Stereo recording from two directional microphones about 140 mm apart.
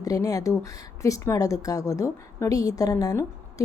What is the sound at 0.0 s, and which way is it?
Speech, 25° left (ahead or behind).